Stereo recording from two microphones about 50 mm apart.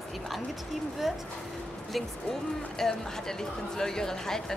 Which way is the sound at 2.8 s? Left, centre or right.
Centre.